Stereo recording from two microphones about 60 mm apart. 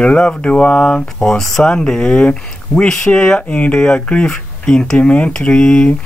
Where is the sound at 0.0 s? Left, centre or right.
Centre.